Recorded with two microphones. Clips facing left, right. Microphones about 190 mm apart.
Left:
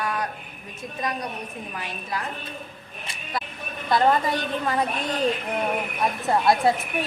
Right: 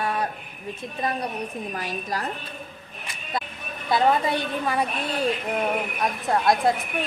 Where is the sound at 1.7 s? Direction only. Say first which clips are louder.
Right 3 dB; 40° right (ahead or behind).